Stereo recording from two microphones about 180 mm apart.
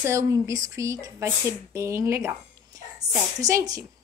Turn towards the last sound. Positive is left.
turn(degrees=-20)  # may be behind; listen again after turning